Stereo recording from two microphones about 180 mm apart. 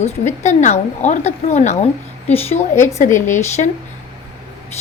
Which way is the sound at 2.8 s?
40° left (ahead or behind).